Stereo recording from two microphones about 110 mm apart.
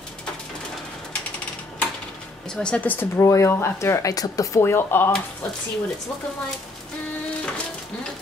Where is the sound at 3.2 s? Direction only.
25° left (ahead or behind).